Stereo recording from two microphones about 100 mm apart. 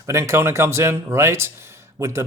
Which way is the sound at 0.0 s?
30° right (ahead or behind).